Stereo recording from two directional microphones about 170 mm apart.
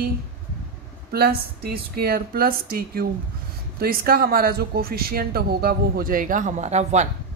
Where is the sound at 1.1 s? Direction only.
65° right (ahead or behind); by 7.1 s 40° right (ahead or behind).